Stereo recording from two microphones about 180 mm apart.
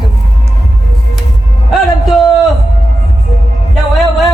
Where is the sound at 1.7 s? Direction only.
Centre (ahead or behind).